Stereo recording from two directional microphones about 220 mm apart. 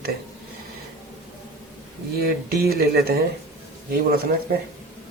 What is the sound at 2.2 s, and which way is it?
Speech, 45° right (ahead or behind).